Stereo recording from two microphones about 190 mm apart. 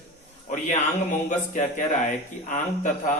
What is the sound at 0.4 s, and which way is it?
A man's voice, 40° left (ahead or behind).